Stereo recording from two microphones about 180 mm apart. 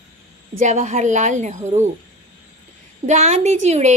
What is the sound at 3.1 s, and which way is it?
Speech, 40° right (ahead or behind).